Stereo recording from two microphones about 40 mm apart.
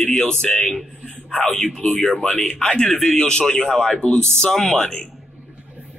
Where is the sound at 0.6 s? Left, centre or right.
Centre.